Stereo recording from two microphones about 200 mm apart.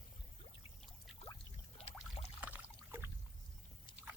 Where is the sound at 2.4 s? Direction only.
10° right (ahead or behind).